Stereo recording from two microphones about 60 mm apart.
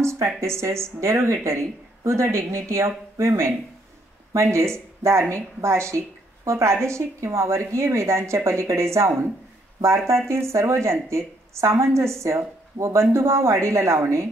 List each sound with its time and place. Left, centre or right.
0.0 s speech: right